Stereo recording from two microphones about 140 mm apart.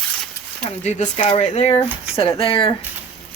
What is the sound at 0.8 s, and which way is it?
Speech, 55° left (ahead or behind).